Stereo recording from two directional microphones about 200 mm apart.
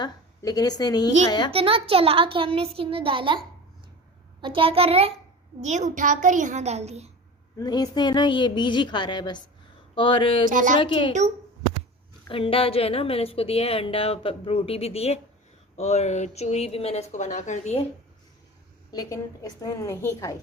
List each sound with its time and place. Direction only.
0.0 s a woman's voice: 20° left (ahead or behind)
1.5 s a woman's voice: 30° right (ahead or behind)
7.6 s a woman's voice: 20° left (ahead or behind)
10.5 s a child's voice: 40° right (ahead or behind)
10.8 s a woman's voice: 25° left (ahead or behind)
12.3 s a woman's voice: 25° left (ahead or behind)
18.9 s a woman's voice: 15° left (ahead or behind)